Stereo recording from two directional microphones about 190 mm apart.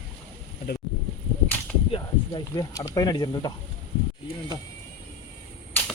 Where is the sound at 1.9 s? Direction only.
20° left (ahead or behind).